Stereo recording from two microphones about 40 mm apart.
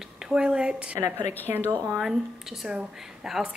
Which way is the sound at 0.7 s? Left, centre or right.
Right.